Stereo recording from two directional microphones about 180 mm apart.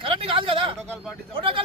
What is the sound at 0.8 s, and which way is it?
Speech, centre (ahead or behind).